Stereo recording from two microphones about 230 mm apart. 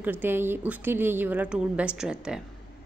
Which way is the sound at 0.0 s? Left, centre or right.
Centre.